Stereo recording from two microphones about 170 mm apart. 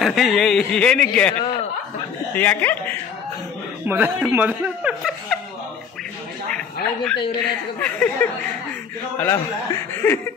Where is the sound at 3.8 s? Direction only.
10° right (ahead or behind).